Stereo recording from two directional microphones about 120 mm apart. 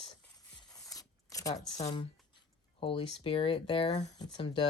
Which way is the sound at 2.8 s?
50° left (ahead or behind).